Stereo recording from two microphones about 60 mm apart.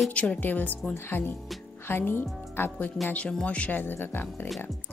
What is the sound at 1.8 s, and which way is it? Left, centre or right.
Speech, left.